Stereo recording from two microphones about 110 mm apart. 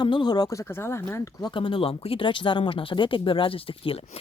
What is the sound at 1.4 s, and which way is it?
Speech, 50° left (ahead or behind).